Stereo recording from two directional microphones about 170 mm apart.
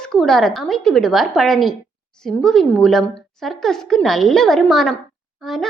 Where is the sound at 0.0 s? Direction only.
5° left (ahead or behind).